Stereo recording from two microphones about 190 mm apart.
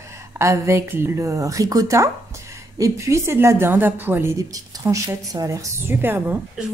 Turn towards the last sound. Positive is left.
turn(degrees=-10)  # may be behind; listen again after turning